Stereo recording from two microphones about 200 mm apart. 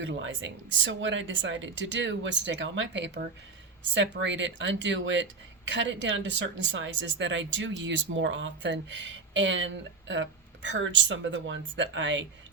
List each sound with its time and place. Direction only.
0.0 s speech: 65° right (ahead or behind)